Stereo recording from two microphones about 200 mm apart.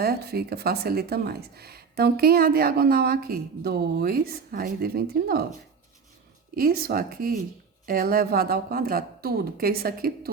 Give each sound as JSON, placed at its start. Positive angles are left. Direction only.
{"t": 0.0, "sound": "speech", "side_deg": -50}
{"t": 6.6, "sound": "speech", "side_deg": -50}